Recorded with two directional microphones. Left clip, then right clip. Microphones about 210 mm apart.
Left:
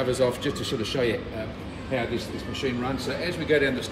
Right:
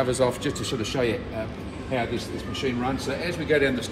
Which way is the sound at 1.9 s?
5° right (ahead or behind).